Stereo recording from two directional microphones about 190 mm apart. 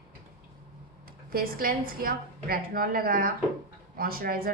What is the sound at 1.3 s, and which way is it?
A woman's voice, 50° right (ahead or behind).